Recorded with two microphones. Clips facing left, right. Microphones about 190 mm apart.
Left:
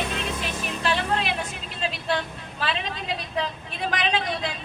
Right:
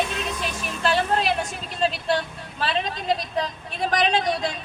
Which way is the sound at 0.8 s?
40° right (ahead or behind).